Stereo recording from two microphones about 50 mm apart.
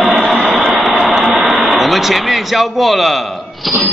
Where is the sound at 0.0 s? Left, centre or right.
Centre.